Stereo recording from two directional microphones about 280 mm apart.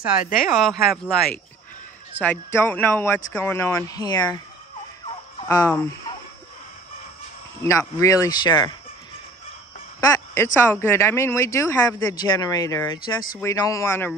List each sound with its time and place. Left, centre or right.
0.2 s speech: left
0.6 s speech: centre
5.5 s speech: centre
7.6 s speech: centre
9.9 s speech: centre